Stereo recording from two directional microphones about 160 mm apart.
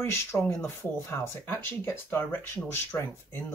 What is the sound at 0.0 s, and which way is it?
Speech, 15° left (ahead or behind).